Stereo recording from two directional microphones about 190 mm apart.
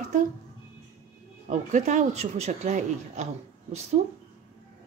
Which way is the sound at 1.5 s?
40° right (ahead or behind).